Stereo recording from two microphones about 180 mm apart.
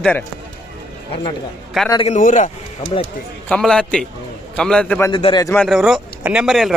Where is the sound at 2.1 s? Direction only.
45° left (ahead or behind).